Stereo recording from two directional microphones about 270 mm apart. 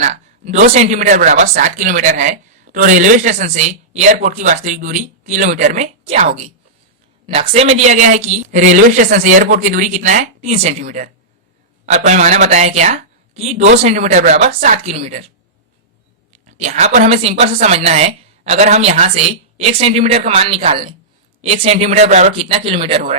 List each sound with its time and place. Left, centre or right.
0.0 s speech: right
16.3 s speech: right